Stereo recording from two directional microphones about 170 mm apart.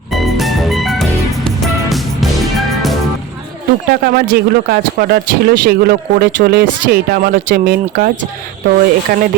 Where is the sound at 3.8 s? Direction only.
70° right (ahead or behind).